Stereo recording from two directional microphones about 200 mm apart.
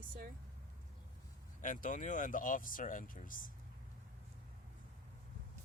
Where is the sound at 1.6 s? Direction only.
40° left (ahead or behind).